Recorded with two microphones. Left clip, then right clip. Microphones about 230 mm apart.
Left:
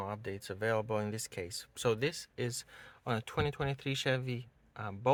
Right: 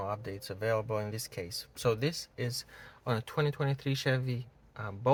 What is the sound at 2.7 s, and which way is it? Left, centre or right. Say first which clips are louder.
Speech: right 2 dB; left.